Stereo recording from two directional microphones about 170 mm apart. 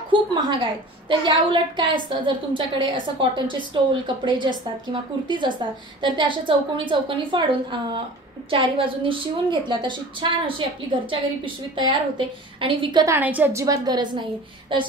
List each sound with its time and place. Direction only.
0.1 s a woman's voice: 30° right (ahead or behind)
5.9 s a woman's voice: 30° right (ahead or behind)
8.5 s a woman's voice: 30° right (ahead or behind)
13.0 s a woman's voice: 15° right (ahead or behind)